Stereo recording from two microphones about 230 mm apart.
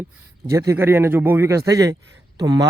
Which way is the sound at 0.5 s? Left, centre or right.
Centre.